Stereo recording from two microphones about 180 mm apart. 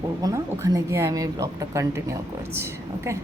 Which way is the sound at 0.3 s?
15° right (ahead or behind).